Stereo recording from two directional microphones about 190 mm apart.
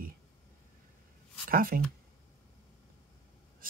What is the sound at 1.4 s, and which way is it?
Speech, 50° right (ahead or behind).